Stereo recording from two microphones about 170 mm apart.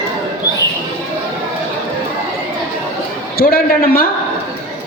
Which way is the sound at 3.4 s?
60° left (ahead or behind).